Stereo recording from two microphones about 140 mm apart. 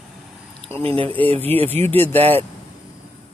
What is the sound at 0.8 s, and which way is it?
Speech, 40° right (ahead or behind).